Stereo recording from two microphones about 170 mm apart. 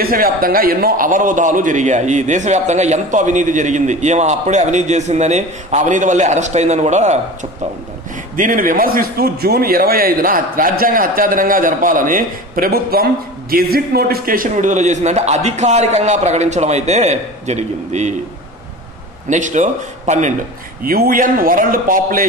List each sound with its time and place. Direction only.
0.0 s a man's voice: 60° right (ahead or behind); by 7.2 s 45° right (ahead or behind)
8.4 s a man's voice: 55° right (ahead or behind)
19.2 s a man's voice: 45° right (ahead or behind)
20.8 s a man's voice: 60° right (ahead or behind)